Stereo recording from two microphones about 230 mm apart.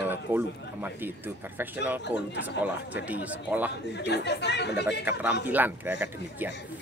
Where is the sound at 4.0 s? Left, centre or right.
Left.